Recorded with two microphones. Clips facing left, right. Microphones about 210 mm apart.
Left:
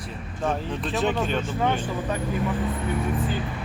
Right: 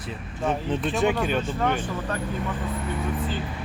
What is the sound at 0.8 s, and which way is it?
Speech, centre (ahead or behind).